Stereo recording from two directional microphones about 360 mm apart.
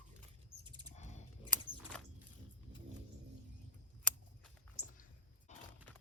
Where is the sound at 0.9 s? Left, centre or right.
Centre.